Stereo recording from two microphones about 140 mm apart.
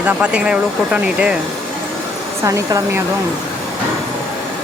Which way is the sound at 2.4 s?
25° right (ahead or behind).